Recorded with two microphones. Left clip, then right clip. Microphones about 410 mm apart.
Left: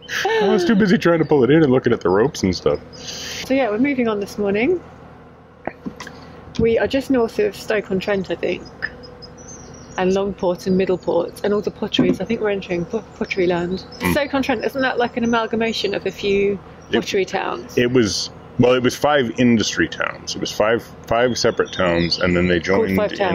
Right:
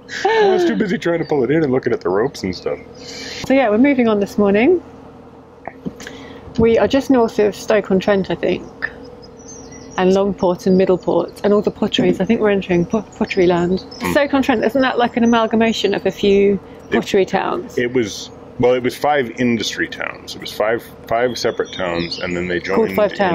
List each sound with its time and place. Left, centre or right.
0.3 s a sound: centre
0.7 s speech: left
3.4 s speech: centre
6.5 s speech: centre
9.9 s speech: centre
17.8 s speech: left
22.9 s speech: centre